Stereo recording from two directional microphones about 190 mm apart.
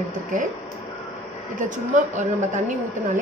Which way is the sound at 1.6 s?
40° right (ahead or behind).